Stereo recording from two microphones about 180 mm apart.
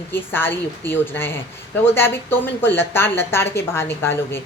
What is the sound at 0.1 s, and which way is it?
A woman's voice, 10° left (ahead or behind).